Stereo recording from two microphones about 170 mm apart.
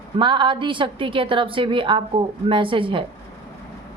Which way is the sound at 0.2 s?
30° right (ahead or behind).